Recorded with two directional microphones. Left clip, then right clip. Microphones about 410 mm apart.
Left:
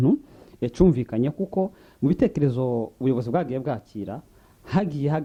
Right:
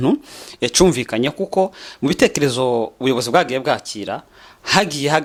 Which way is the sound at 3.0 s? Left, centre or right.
Centre.